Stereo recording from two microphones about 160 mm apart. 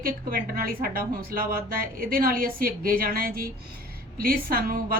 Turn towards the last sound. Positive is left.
turn(degrees=-65)  # may be behind; listen again after turning